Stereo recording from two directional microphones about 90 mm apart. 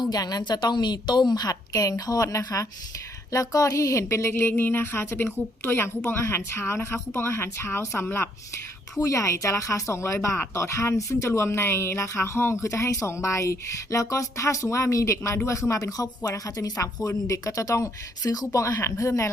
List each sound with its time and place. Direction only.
0.0 s a woman's voice: 45° left (ahead or behind)